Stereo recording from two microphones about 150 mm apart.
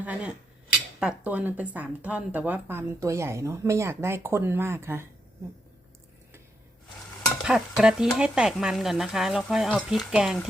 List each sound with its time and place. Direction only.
0.0 s speech: 10° right (ahead or behind)
7.4 s speech: 5° right (ahead or behind)